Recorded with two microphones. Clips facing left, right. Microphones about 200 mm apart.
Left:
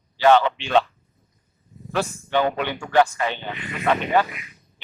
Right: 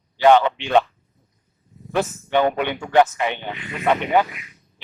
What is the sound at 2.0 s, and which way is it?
A man's voice, 20° right (ahead or behind).